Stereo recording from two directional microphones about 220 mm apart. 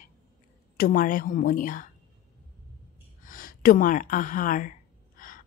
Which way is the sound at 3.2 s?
40° left (ahead or behind).